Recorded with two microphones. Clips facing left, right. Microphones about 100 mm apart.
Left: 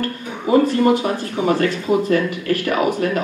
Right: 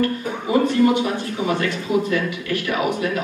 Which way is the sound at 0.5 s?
35° left (ahead or behind).